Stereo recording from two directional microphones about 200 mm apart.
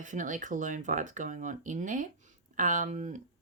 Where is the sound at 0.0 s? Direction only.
40° right (ahead or behind).